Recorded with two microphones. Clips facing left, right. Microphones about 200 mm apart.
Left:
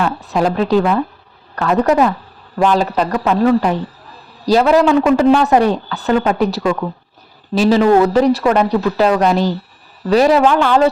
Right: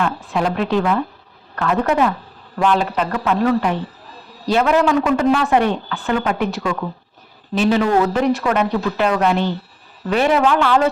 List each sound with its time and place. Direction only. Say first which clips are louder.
0.3 s speech: left 6 dB; 35° left (ahead or behind)